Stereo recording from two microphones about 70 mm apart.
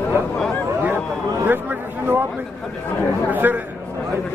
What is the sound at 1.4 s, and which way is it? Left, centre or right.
Speech, right.